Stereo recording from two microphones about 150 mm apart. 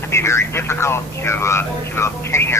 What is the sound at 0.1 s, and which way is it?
Speech, 20° left (ahead or behind).